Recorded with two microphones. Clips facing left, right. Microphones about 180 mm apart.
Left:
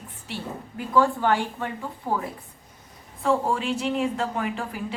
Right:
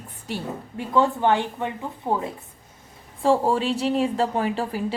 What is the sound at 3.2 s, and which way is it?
Speech, 35° right (ahead or behind).